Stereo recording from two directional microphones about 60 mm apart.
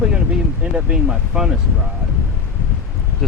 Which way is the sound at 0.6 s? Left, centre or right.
Centre.